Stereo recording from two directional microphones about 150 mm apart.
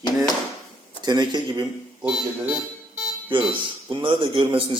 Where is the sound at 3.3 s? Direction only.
35° right (ahead or behind).